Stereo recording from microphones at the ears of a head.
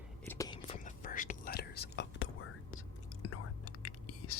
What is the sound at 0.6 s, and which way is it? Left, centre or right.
Whispering, left.